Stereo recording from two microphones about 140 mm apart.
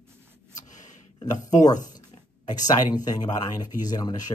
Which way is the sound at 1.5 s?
25° left (ahead or behind).